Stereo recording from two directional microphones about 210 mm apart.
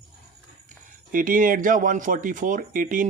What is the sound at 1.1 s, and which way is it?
Speech, 40° right (ahead or behind).